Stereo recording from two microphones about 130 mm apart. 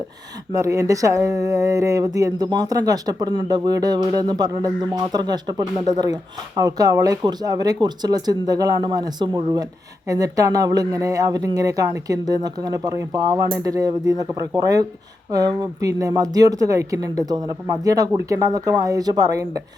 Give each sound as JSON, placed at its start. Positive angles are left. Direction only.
{"t": 0.5, "sound": "speech", "side_deg": -25}